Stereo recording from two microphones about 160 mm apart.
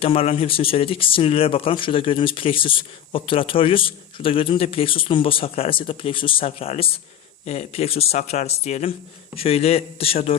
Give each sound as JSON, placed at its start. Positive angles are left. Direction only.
{"t": 0.0, "sound": "speech", "side_deg": 35}